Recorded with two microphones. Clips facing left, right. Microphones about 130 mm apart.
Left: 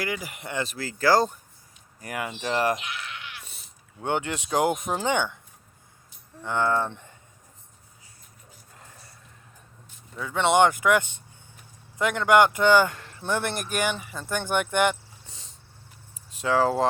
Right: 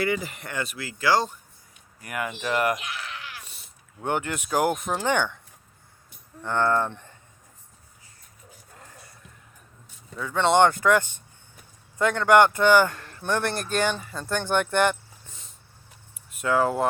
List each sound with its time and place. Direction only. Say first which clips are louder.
0.0 s speech: right 5 dB; 10° left (ahead or behind)
0.6 s speech: left 2 dB; 35° left (ahead or behind)
2.0 s speech: right 1 dB; 30° left (ahead or behind)
4.0 s speech: even; 25° left (ahead or behind)
6.4 s speech: right 1 dB; 15° left (ahead or behind)
10.2 s speech: right 1 dB; 20° left (ahead or behind)
16.4 s speech: even; 25° left (ahead or behind)